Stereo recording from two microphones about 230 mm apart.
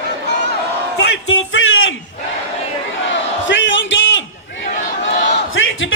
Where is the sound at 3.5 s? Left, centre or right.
Left.